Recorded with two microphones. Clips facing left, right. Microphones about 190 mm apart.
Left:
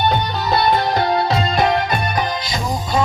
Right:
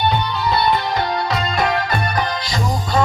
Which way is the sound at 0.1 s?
45° left (ahead or behind).